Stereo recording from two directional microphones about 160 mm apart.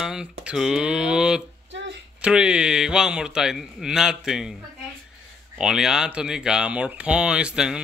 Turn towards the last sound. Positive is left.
turn(degrees=-5)  # may be behind; listen again after turning